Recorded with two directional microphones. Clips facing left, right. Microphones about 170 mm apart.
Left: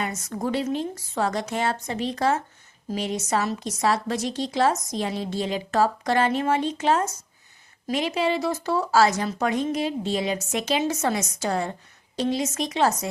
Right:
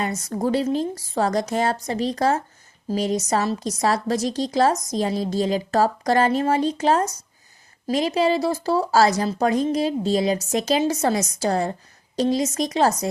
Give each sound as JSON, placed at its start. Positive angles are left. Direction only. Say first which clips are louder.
{"t": 0.0, "sound": "a woman's voice", "louder": "right 4 dB", "side_deg": -35}